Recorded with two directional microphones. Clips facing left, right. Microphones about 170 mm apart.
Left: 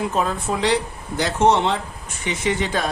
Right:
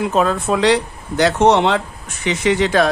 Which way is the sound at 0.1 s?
80° right.